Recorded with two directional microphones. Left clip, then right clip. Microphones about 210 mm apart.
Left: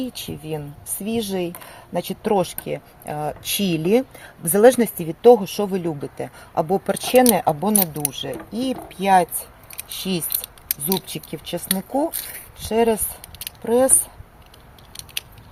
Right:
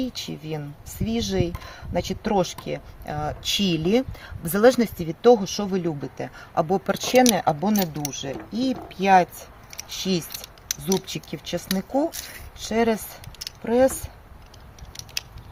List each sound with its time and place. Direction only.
1.2 s speech: 15° left (ahead or behind)